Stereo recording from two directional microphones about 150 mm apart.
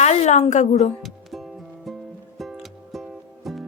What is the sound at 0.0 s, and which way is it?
Speech, 50° left (ahead or behind).